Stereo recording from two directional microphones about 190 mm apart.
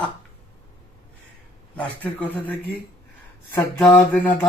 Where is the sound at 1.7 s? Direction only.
10° left (ahead or behind).